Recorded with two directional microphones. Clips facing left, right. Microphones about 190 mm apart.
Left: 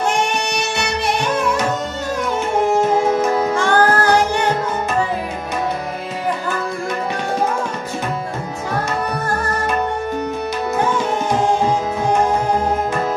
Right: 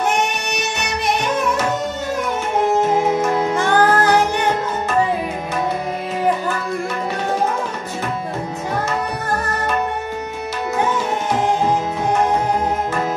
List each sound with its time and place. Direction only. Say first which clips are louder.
3.3 s music: left 1 dB; 20° right (ahead or behind)